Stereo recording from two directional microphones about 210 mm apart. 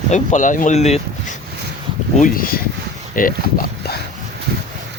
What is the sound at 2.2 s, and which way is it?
Speech, 45° left (ahead or behind).